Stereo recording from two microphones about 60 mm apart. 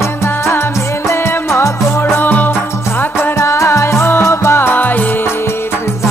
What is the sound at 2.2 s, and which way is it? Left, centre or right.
Music, left.